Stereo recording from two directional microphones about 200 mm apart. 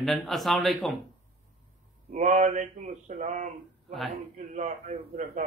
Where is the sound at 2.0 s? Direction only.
35° right (ahead or behind).